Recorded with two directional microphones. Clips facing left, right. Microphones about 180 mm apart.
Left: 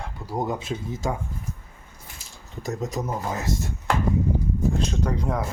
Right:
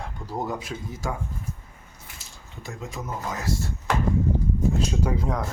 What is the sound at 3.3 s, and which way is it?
Speech, 20° left (ahead or behind).